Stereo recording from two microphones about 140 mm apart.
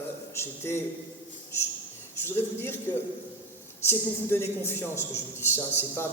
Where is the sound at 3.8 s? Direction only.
15° left (ahead or behind).